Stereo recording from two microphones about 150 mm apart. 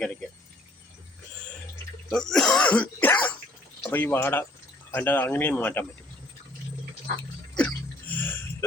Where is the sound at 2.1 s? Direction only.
5° left (ahead or behind).